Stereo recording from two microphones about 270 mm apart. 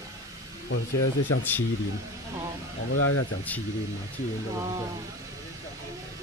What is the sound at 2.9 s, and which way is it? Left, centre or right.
Speech, left.